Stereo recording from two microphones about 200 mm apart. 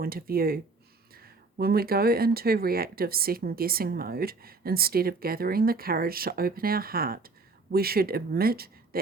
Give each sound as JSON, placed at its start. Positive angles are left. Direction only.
{"t": 0.0, "sound": "speech", "side_deg": -50}